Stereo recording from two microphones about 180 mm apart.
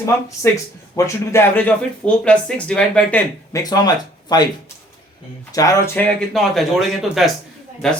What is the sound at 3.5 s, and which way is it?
Speech, 20° left (ahead or behind).